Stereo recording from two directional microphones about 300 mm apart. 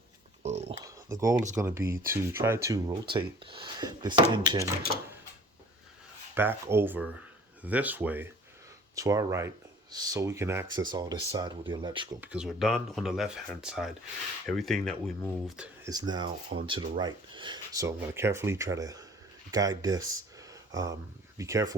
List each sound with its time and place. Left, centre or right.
0.4 s speech: right
0.9 s speech: centre
6.3 s speech: centre
20.5 s a sound: centre
21.3 s speech: centre